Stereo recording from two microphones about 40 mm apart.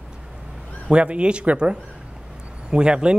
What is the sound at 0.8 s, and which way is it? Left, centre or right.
A man's voice, right.